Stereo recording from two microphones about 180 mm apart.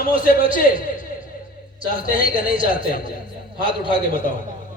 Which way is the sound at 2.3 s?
30° right (ahead or behind).